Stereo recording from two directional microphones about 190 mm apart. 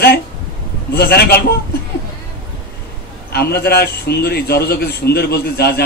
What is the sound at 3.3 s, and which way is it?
A man's voice, 55° left (ahead or behind).